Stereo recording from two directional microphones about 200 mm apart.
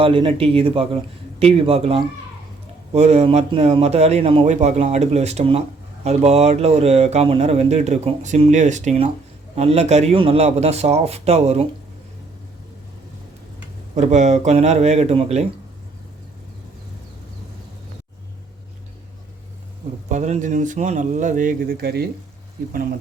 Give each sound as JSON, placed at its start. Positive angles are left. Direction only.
{"t": 0.0, "sound": "speech", "side_deg": -25}
{"t": 13.9, "sound": "speech", "side_deg": -35}
{"t": 20.1, "sound": "speech", "side_deg": -35}